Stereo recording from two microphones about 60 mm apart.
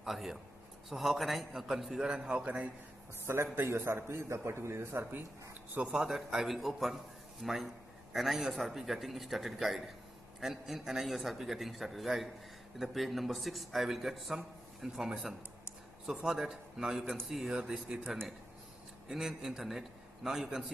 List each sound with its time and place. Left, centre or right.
0.0 s a man's voice: centre
2.4 s a man's voice: right
3.5 s a man's voice: right
5.9 s a man's voice: centre
17.8 s a man's voice: centre